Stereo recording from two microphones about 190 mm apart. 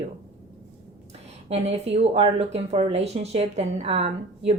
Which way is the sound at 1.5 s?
35° right (ahead or behind).